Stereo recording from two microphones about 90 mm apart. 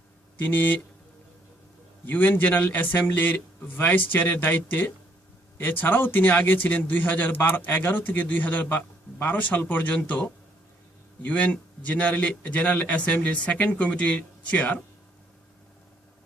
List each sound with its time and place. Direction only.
0.3 s a man's voice: 20° left (ahead or behind)
2.0 s a man's voice: 20° left (ahead or behind)